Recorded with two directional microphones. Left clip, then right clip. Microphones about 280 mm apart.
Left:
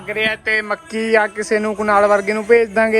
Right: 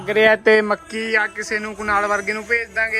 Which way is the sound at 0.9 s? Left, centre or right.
Centre.